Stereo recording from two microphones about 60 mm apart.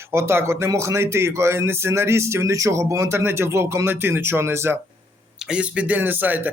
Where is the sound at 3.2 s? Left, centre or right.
Right.